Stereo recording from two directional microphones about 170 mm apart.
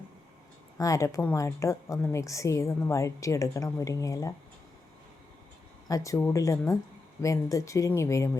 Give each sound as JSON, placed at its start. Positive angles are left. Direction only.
{"t": 0.8, "sound": "a woman's voice", "side_deg": 20}
{"t": 5.9, "sound": "a woman's voice", "side_deg": 20}